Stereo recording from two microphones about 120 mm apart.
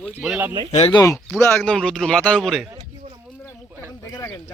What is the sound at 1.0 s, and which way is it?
Speech, 20° left (ahead or behind).